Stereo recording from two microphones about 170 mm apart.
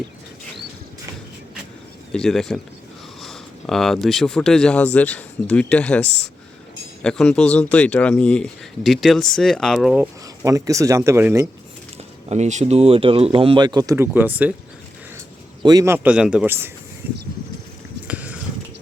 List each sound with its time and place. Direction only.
2.1 s speech: 5° left (ahead or behind)
10.0 s speech: 20° right (ahead or behind)
12.3 s speech: 40° right (ahead or behind); by 14.5 s 10° right (ahead or behind)
15.6 s a man's voice: 20° right (ahead or behind)
16.0 s speech: 5° right (ahead or behind)
18.1 s a sound: 10° right (ahead or behind)